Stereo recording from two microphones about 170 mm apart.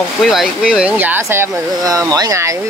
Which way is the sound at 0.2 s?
Centre (ahead or behind).